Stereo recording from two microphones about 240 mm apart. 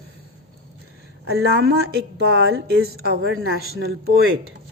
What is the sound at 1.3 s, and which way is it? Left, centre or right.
A woman's voice, right.